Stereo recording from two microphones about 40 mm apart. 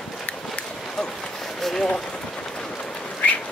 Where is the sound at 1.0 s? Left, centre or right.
Centre.